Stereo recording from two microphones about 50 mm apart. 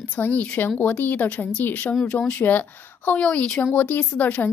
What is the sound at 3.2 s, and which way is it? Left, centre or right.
Speech, left.